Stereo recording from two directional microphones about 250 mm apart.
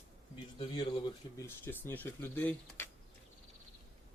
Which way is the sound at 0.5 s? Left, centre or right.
Centre.